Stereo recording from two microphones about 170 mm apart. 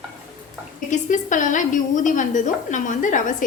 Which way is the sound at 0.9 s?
50° left (ahead or behind).